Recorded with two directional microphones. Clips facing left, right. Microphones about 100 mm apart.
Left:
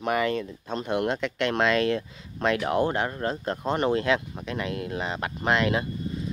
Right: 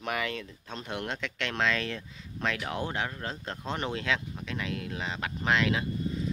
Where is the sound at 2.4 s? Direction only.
45° left (ahead or behind).